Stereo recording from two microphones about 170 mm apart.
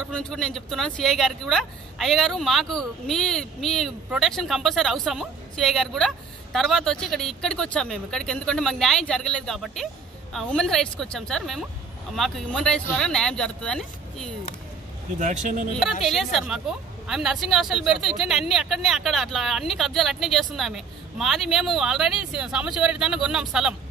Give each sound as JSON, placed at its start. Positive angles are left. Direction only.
{"t": 0.1, "sound": "speech", "side_deg": 5}
{"t": 15.1, "sound": "speech", "side_deg": -45}
{"t": 15.8, "sound": "speech", "side_deg": 0}